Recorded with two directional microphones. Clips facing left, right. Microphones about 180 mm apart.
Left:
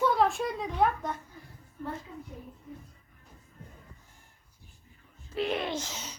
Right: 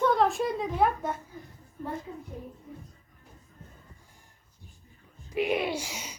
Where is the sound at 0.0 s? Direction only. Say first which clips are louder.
Right 2 dB; centre (ahead or behind).